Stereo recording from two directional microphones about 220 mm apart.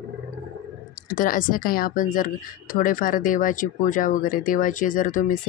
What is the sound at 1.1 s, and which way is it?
Speech, 40° left (ahead or behind).